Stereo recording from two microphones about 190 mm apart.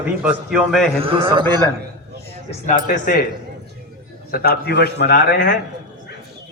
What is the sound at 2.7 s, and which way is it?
Speech, 45° left (ahead or behind).